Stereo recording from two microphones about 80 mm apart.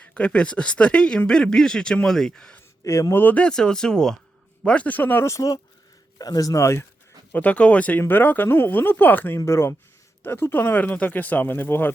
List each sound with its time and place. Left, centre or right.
0.0 s speech: centre
2.8 s a man's voice: left
3.2 s speech: centre
5.3 s speech: left
7.3 s a man's voice: centre